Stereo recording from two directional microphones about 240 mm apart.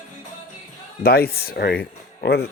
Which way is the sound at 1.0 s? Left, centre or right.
Left.